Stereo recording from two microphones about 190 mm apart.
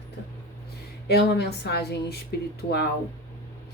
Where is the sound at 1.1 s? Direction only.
60° left (ahead or behind).